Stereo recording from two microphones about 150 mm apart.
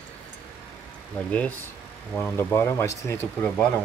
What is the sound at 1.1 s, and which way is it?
Speech, 10° left (ahead or behind).